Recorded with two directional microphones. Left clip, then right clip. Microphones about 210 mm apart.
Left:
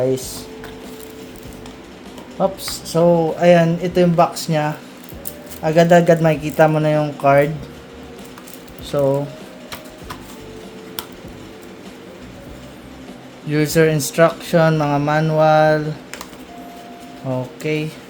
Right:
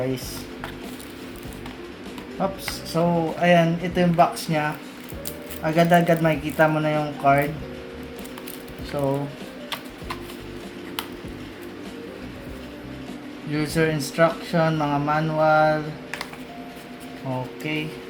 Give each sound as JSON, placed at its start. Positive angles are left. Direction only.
{"t": 2.4, "sound": "speech", "side_deg": 40}
{"t": 8.9, "sound": "speech", "side_deg": 50}
{"t": 13.5, "sound": "speech", "side_deg": 45}
{"t": 17.3, "sound": "speech", "side_deg": 45}